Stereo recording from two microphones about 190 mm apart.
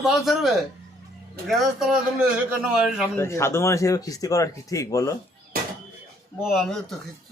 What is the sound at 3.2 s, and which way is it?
Speech, 15° left (ahead or behind).